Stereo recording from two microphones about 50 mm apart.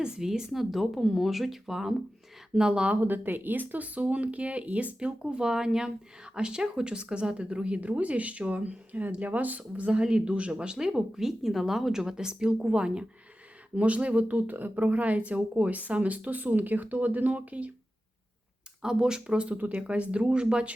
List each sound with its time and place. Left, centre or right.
0.0 s speech: centre
2.9 s speech: right
18.8 s speech: centre